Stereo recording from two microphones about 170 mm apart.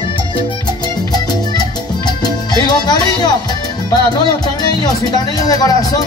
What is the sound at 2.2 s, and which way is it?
Music, 25° left (ahead or behind).